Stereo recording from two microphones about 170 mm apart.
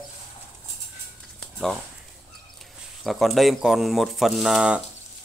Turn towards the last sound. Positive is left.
turn(degrees=-5)  # may be behind; listen again after turning